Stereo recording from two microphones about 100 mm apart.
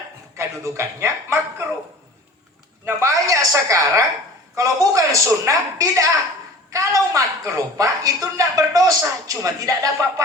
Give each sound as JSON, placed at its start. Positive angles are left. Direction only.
{"t": 0.3, "sound": "speech", "side_deg": -30}
{"t": 2.8, "sound": "a woman's voice", "side_deg": -30}